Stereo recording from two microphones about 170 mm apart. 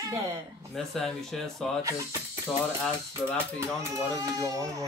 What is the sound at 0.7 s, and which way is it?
Speech, centre (ahead or behind).